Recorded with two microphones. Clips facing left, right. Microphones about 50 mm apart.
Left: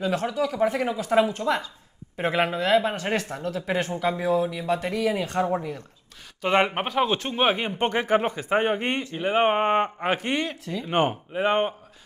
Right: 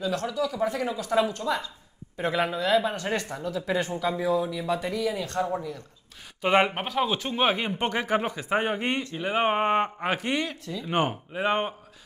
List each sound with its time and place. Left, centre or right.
0.1 s a man's voice: left
2.6 s speech: centre
3.3 s speech: left
3.6 s a man's voice: left
6.4 s speech: centre
6.7 s a man's voice: centre
10.9 s a man's voice: centre